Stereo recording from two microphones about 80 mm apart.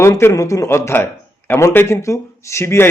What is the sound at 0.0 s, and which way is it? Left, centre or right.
A man's voice, left.